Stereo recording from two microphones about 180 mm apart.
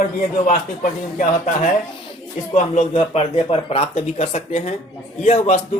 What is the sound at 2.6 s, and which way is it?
Speech, 35° left (ahead or behind).